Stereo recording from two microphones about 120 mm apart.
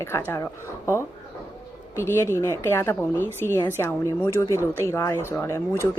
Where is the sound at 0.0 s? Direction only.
25° left (ahead or behind).